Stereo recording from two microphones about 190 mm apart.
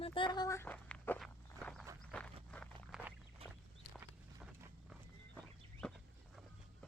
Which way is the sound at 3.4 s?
30° right (ahead or behind).